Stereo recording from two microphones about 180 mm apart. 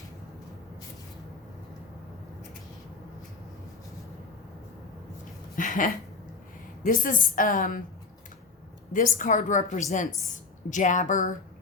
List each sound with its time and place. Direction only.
5.5 s a sound: 50° left (ahead or behind)
6.8 s a woman's voice: 50° left (ahead or behind)
8.9 s a woman's voice: 45° left (ahead or behind)